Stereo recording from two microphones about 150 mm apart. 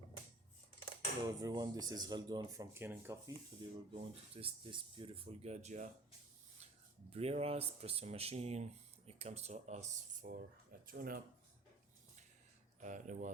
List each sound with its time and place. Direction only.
1.4 s speech: 25° right (ahead or behind)
3.6 s speech: 30° right (ahead or behind); by 5.9 s 50° right (ahead or behind)
7.1 s speech: 45° right (ahead or behind)
10.2 s speech: 75° right (ahead or behind)
12.8 s speech: 55° right (ahead or behind)